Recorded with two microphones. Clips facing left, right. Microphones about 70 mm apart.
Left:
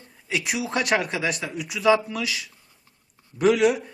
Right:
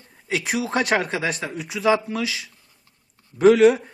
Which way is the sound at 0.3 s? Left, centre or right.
Right.